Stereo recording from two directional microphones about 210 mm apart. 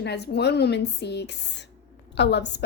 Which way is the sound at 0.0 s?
50° left (ahead or behind).